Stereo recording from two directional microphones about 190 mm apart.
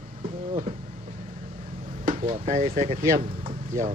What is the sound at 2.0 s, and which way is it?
Vehicle, 40° right (ahead or behind).